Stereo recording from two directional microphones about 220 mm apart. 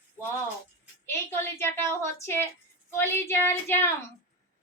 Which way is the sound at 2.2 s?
10° left (ahead or behind).